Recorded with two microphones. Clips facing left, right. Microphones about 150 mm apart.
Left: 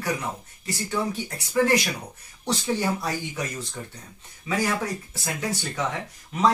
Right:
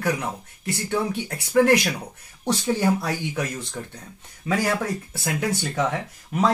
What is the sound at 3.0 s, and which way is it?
Speech, 60° right (ahead or behind).